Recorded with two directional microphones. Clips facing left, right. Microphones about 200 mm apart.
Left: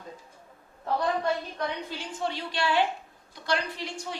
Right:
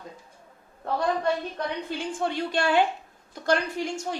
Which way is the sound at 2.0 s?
50° right (ahead or behind).